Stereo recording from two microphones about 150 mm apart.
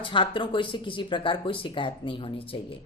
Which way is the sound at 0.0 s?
35° left (ahead or behind).